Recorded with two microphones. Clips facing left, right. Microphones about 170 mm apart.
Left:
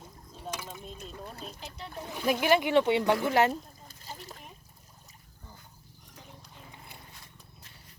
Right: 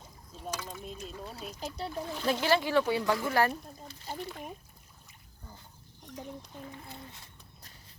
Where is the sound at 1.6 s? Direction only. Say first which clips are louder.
Right 6 dB; 35° right (ahead or behind).